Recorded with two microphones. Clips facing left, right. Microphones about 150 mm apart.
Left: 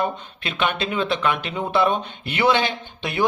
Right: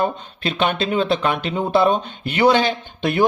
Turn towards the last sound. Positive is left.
turn(degrees=-40)  # may be behind; listen again after turning